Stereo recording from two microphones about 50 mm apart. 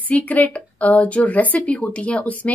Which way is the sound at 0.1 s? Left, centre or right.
Left.